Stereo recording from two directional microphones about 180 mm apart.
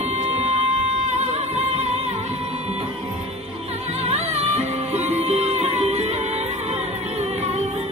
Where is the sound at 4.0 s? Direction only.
35° right (ahead or behind).